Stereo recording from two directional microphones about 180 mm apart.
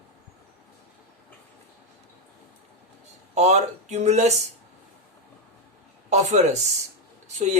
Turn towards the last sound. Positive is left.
turn(degrees=-40)  # may be behind; listen again after turning